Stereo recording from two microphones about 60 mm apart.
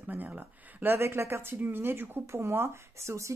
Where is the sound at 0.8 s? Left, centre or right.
Right.